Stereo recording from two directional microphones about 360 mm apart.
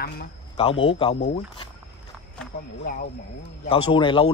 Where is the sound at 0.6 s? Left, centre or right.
Centre.